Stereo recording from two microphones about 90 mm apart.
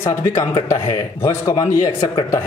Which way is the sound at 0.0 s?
30° left (ahead or behind).